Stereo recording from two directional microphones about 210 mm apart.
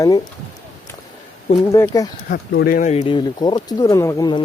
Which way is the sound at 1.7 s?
15° left (ahead or behind).